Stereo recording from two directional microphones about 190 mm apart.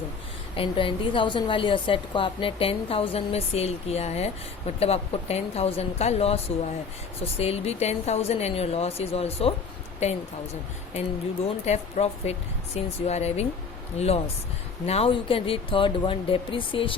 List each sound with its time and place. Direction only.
0.5 s a woman's voice: 25° left (ahead or behind)
11.4 s a woman's voice: 35° left (ahead or behind)
14.8 s speech: 30° left (ahead or behind)